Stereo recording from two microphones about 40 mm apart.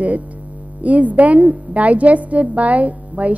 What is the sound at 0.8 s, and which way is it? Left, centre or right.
A woman's voice, right.